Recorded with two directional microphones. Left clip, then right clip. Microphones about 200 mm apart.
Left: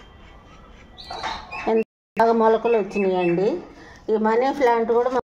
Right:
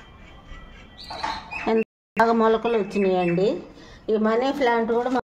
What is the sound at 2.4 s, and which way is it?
Speech, 50° right (ahead or behind).